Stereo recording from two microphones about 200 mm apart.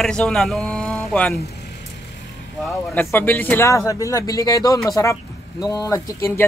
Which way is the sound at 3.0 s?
10° left (ahead or behind).